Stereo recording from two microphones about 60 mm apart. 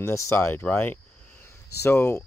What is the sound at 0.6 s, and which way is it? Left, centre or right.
Speech, left.